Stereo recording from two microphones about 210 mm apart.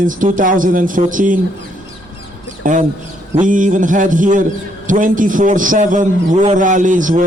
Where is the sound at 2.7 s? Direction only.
40° right (ahead or behind).